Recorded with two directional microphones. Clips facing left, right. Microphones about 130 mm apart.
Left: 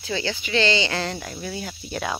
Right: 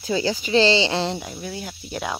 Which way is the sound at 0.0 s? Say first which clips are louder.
Right 5 dB; 40° right (ahead or behind).